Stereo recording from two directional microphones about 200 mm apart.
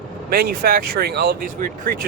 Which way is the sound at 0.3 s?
50° right (ahead or behind).